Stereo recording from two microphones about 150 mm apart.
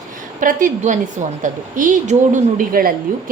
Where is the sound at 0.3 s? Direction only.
60° right (ahead or behind).